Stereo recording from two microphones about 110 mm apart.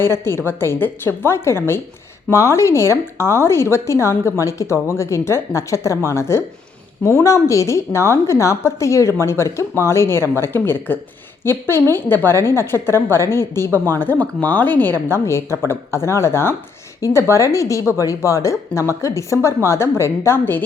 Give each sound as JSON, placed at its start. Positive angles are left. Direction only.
{"t": 0.0, "sound": "a woman's voice", "side_deg": 20}